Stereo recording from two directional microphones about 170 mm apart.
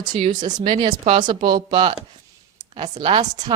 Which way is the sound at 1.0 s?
45° right (ahead or behind).